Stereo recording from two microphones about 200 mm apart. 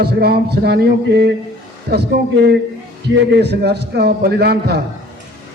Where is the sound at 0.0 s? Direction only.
50° right (ahead or behind).